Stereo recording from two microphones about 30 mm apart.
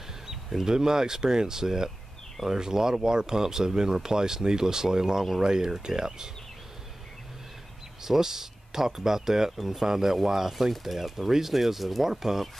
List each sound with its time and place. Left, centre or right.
0.7 s speech: centre
8.0 s speech: centre